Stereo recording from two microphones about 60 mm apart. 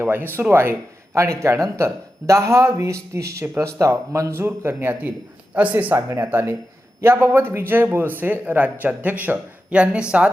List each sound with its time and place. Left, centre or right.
0.0 s a man's voice: right
4.4 s a man's voice: right
5.9 s a man's voice: right
9.7 s a woman's voice: centre